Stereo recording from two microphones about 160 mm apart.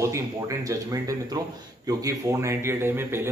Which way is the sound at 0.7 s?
20° right (ahead or behind).